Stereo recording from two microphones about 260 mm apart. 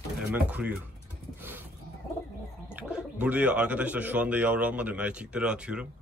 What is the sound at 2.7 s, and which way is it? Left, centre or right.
Speech, centre.